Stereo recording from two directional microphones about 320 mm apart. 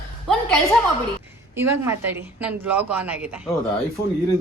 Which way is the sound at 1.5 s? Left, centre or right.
Centre.